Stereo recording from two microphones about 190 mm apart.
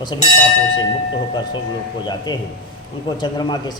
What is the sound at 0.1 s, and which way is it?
Speech, 25° left (ahead or behind).